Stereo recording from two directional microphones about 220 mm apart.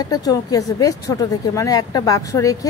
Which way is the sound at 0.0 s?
15° left (ahead or behind).